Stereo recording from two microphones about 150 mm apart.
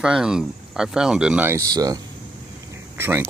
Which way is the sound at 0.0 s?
5° right (ahead or behind).